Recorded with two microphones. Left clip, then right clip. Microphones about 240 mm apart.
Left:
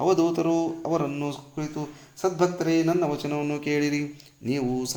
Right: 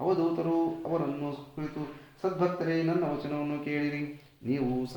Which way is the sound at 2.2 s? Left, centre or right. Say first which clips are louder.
Left 5 dB; left.